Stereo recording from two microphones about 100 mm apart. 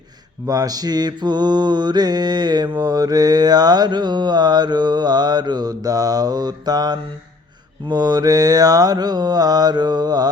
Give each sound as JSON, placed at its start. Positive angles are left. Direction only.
{"t": 0.4, "sound": "mantra", "side_deg": -35}